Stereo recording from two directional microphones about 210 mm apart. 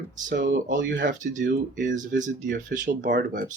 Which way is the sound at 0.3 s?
40° right (ahead or behind).